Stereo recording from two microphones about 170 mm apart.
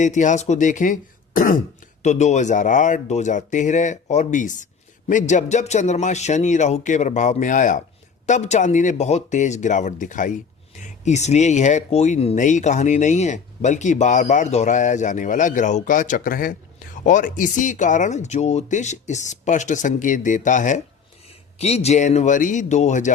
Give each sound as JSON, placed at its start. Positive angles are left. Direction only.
{"t": 0.0, "sound": "speech", "side_deg": 45}